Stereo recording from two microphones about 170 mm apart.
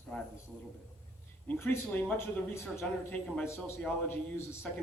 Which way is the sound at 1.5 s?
10° left (ahead or behind).